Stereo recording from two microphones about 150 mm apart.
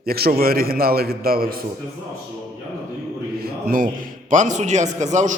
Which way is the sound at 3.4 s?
85° right.